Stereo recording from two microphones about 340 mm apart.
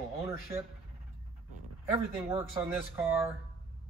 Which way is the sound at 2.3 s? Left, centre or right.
Centre.